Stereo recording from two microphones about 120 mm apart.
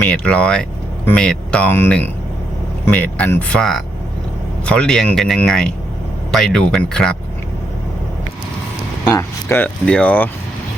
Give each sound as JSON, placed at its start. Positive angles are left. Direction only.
{"t": 0.0, "sound": "speech", "side_deg": 10}
{"t": 9.1, "sound": "speech", "side_deg": 20}
{"t": 9.8, "sound": "speech", "side_deg": 10}